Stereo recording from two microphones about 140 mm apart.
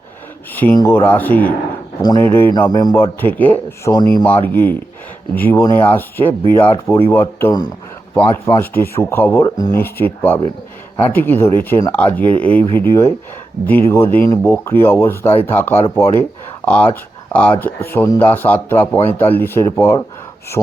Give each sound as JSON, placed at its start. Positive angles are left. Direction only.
{"t": 0.5, "sound": "speech", "side_deg": 10}
{"t": 2.0, "sound": "speech", "side_deg": 30}
{"t": 2.2, "sound": "speech", "side_deg": 15}
{"t": 2.5, "sound": "speech", "side_deg": 30}
{"t": 9.4, "sound": "speech", "side_deg": 25}